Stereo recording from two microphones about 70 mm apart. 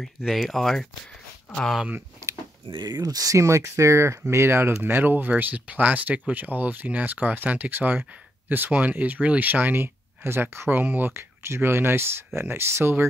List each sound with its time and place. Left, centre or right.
0.0 s speech: centre
2.8 s speech: right